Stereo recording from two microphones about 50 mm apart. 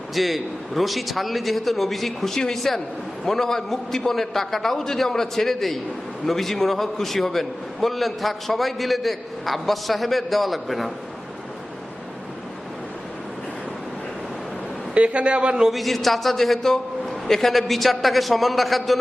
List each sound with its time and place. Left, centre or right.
0.1 s a man's voice: centre
14.9 s speech: right
15.7 s a man's voice: centre